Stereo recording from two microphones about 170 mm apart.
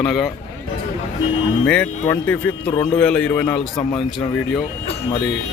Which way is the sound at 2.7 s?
25° left (ahead or behind).